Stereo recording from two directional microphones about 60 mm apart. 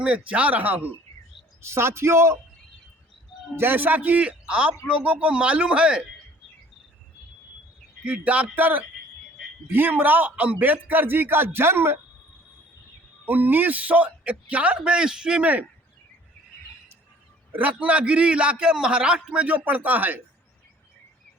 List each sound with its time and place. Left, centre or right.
0.0 s a man's voice: right
1.6 s a man's voice: right
3.5 s a man's voice: right; by 6.0 s centre
8.0 s a man's voice: right
13.2 s a man's voice: right; by 15.4 s centre
17.5 s a man's voice: right